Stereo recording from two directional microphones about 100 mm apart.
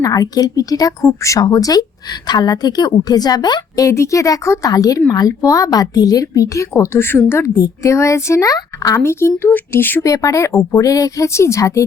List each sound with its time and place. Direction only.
0.0 s a woman's voice: 40° left (ahead or behind)
3.8 s a woman's voice: 30° left (ahead or behind)
9.0 s speech: 25° left (ahead or behind)
10.0 s a woman's voice: 35° left (ahead or behind)